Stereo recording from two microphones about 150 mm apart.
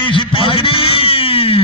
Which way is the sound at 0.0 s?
35° left (ahead or behind).